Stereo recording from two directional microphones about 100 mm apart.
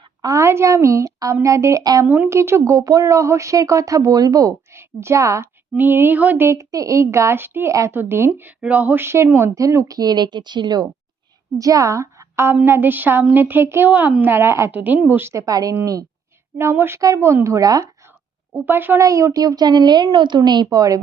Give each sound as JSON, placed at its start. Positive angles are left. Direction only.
{"t": 0.2, "sound": "speech", "side_deg": -35}
{"t": 2.0, "sound": "speech", "side_deg": -20}
{"t": 11.5, "sound": "a woman's voice", "side_deg": -35}
{"t": 14.7, "sound": "speech", "side_deg": -15}
{"t": 16.6, "sound": "speech", "side_deg": -25}
{"t": 18.5, "sound": "speech", "side_deg": -20}
{"t": 18.9, "sound": "speech", "side_deg": -30}